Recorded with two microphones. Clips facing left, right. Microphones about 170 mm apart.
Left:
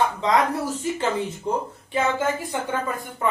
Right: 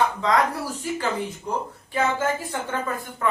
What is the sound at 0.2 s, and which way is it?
Speech, 20° left (ahead or behind).